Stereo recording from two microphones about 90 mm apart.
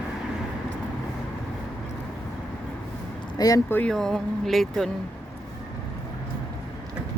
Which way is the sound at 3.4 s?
45° left (ahead or behind).